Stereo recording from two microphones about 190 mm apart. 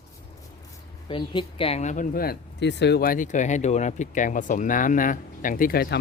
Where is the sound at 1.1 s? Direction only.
25° left (ahead or behind).